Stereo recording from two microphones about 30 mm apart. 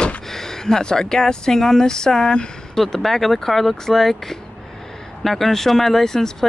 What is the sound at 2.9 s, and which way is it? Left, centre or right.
Speech, centre.